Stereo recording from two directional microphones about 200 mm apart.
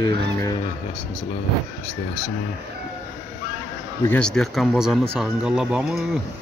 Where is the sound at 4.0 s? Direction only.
5° left (ahead or behind).